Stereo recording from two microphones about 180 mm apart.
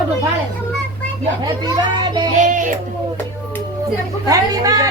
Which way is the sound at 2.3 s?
45° right (ahead or behind).